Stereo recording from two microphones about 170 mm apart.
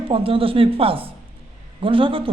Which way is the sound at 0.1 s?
30° right (ahead or behind).